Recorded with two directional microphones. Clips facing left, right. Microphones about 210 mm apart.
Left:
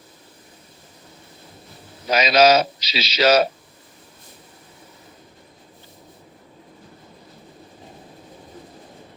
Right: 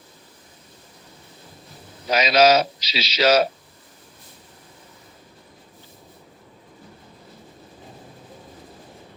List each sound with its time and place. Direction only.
2.1 s a man's voice: 50° left (ahead or behind)